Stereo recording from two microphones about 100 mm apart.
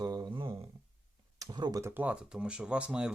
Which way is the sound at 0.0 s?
40° right (ahead or behind).